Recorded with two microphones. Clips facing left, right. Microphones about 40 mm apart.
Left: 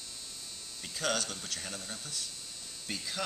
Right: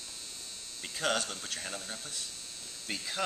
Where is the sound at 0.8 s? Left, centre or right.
Centre.